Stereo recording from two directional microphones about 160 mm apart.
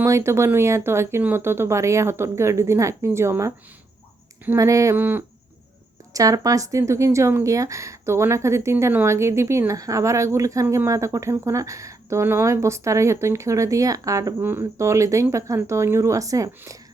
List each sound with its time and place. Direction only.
0.0 s speech: 15° right (ahead or behind)